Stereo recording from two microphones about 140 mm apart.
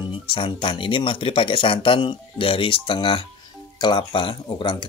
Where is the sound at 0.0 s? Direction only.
35° left (ahead or behind).